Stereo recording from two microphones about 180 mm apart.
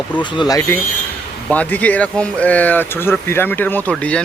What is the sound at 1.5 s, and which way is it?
Speech, 10° left (ahead or behind).